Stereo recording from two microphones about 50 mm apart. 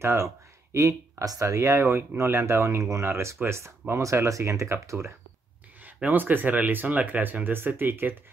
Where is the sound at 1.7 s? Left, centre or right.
Right.